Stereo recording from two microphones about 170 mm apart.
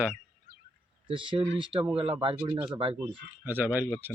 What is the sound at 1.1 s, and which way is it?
Speech, 30° right (ahead or behind).